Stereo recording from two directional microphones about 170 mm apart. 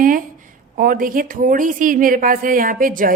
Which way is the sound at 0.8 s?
55° right (ahead or behind).